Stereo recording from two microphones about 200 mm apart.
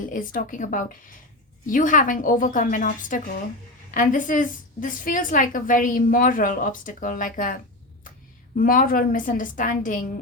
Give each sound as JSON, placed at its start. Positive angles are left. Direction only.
{"t": 0.0, "sound": "a woman's voice", "side_deg": 40}